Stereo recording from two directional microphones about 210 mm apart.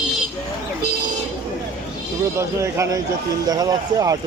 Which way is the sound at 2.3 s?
15° right (ahead or behind).